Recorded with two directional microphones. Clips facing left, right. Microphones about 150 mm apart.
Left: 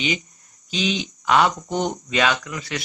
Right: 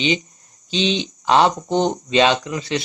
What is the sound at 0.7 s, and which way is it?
Speech, 25° right (ahead or behind).